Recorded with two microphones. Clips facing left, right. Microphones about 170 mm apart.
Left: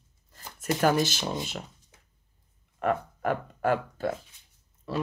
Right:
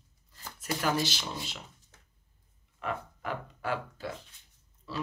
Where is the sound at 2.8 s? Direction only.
50° left (ahead or behind).